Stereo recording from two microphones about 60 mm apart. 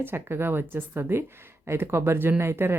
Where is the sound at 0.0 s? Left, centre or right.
Right.